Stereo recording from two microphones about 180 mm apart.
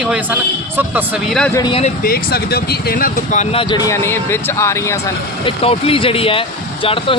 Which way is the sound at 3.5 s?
25° left (ahead or behind).